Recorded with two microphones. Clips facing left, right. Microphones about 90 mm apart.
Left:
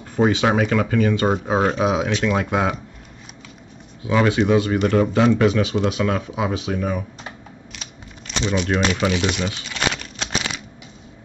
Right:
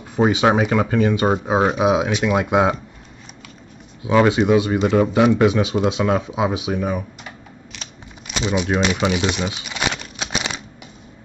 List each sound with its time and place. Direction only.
0.1 s speech: 15° right (ahead or behind)
4.0 s speech: 20° right (ahead or behind)
8.3 s crumpling: 15° right (ahead or behind)